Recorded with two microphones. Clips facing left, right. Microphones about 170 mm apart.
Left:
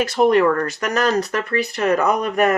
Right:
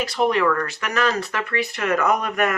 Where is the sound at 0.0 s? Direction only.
45° left (ahead or behind).